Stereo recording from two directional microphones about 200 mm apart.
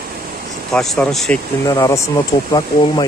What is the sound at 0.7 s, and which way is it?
Speech, 5° left (ahead or behind).